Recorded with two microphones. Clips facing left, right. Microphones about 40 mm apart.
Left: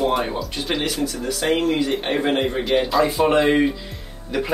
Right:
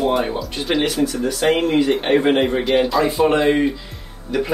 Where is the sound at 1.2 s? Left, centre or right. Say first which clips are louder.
Right 2 dB; centre.